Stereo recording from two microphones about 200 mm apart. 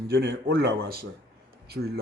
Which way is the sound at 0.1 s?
60° right (ahead or behind).